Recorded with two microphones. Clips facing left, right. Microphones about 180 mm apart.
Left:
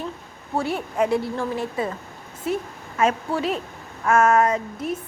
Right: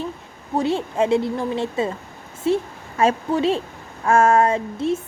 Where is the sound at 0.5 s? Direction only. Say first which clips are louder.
Right 4 dB; 25° right (ahead or behind).